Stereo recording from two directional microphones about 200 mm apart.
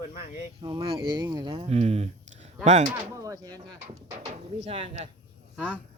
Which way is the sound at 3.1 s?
15° right (ahead or behind).